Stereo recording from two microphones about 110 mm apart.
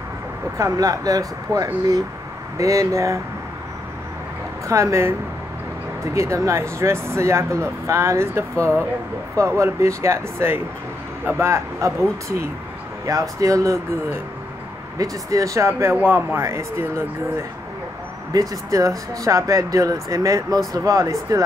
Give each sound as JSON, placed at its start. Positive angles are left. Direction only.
{"t": 0.6, "sound": "speech", "side_deg": -30}
{"t": 4.6, "sound": "speech", "side_deg": -25}
{"t": 6.1, "sound": "speech", "side_deg": -25}
{"t": 13.0, "sound": "speech", "side_deg": -30}
{"t": 18.3, "sound": "speech", "side_deg": -30}